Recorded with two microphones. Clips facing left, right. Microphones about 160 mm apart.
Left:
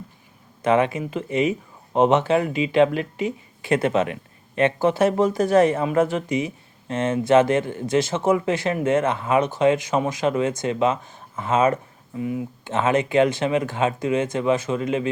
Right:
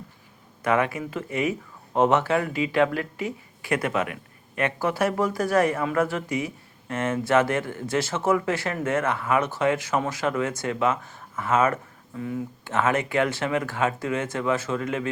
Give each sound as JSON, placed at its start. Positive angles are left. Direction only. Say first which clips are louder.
{"t": 0.6, "sound": "speech", "louder": "left 4 dB", "side_deg": 20}